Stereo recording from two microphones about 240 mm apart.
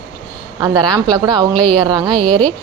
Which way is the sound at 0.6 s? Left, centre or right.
Centre.